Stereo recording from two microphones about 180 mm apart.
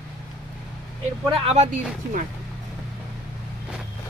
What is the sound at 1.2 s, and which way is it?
Speech, 30° right (ahead or behind).